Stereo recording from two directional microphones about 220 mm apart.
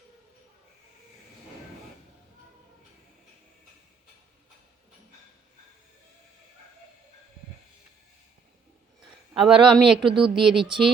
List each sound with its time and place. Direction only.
9.3 s speech: centre (ahead or behind)
10.1 s speech: 20° right (ahead or behind)
10.3 s speech: centre (ahead or behind)